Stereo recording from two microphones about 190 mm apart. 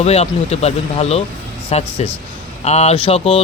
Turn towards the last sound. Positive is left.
turn(degrees=30)  # may be behind; listen again after turning